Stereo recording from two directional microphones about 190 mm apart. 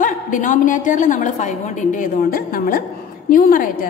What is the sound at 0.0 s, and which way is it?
A woman's voice, 45° left (ahead or behind).